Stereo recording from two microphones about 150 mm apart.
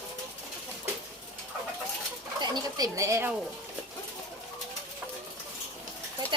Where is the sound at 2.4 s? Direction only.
25° right (ahead or behind).